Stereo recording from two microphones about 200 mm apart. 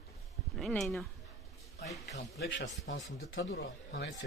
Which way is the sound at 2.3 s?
65° left (ahead or behind).